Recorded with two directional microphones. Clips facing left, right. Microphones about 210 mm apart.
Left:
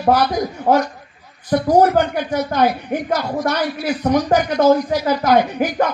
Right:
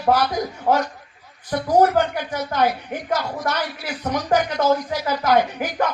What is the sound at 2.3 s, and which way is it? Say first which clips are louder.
A man's voice: left 4 dB; 35° left (ahead or behind).